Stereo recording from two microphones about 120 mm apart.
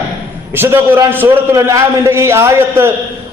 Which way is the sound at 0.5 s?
20° right (ahead or behind).